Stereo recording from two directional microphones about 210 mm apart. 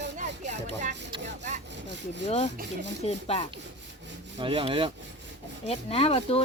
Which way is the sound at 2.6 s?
55° right (ahead or behind).